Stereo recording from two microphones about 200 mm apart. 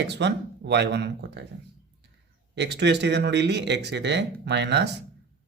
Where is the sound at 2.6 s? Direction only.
60° right (ahead or behind).